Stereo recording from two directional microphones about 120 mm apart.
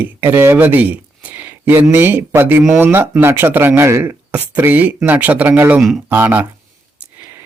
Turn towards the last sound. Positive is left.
turn(degrees=-15)  # may be behind; listen again after turning